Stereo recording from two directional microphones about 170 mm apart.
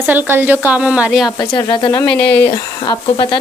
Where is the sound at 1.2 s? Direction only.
25° left (ahead or behind).